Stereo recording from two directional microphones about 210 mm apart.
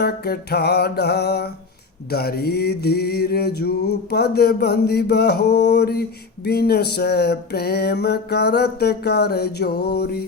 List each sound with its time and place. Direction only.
0.0 s music: 50° left (ahead or behind)